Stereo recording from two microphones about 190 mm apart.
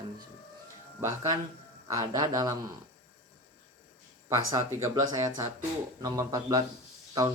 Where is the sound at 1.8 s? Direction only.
20° right (ahead or behind).